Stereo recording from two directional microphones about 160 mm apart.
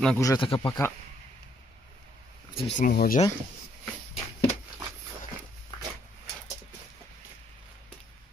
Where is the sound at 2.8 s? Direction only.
60° left (ahead or behind).